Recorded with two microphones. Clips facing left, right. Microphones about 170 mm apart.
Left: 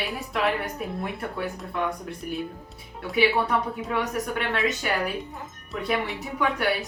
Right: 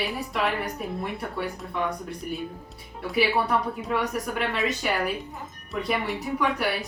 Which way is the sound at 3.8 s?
Centre (ahead or behind).